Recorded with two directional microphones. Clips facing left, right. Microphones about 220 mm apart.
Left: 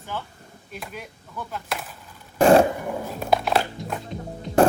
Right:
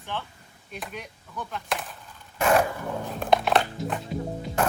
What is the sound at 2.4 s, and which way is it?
Zipper, 30° left (ahead or behind).